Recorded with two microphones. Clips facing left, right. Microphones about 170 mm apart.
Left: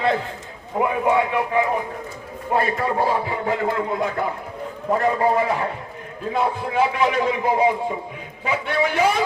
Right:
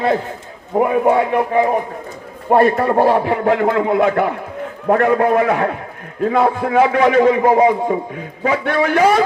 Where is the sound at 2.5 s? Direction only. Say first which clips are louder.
Right 9 dB; 55° right (ahead or behind).